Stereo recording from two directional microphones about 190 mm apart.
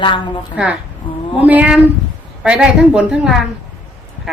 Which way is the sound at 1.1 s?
25° left (ahead or behind).